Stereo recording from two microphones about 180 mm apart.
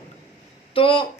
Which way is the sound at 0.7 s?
30° left (ahead or behind).